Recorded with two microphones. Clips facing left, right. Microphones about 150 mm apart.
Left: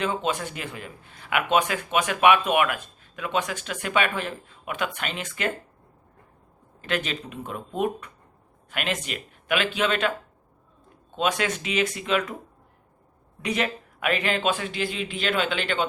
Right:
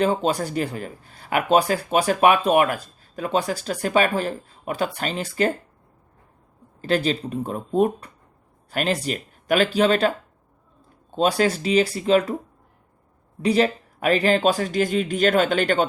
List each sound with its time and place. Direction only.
0.0 s speech: 40° right (ahead or behind)
6.8 s speech: 35° right (ahead or behind)
11.1 s speech: 35° right (ahead or behind)
13.4 s speech: 35° right (ahead or behind)